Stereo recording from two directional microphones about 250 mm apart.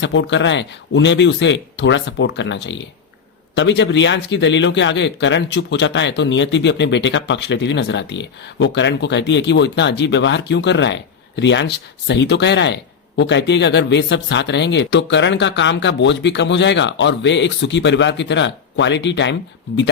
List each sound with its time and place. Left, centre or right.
0.0 s speech: left